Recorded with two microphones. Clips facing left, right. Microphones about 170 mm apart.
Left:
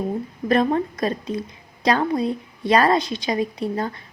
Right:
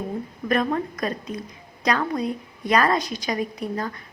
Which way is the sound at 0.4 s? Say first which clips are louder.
Left 4 dB; 30° left (ahead or behind).